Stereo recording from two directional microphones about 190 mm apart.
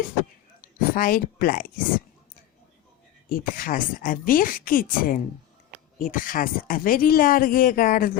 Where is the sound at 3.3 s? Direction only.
45° left (ahead or behind).